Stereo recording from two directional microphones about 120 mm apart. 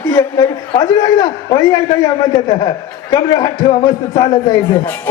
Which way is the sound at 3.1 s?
35° left (ahead or behind).